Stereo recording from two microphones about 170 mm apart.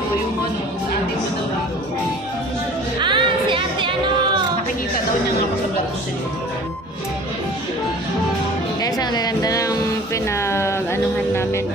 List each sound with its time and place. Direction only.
3.0 s music: 30° right (ahead or behind)
8.8 s music: 20° left (ahead or behind)